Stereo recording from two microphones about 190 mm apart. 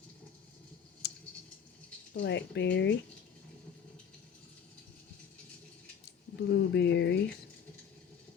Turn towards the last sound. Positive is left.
turn(degrees=65)  # may be behind; listen again after turning